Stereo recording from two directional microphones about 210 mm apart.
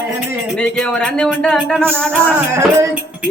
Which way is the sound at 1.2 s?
5° left (ahead or behind).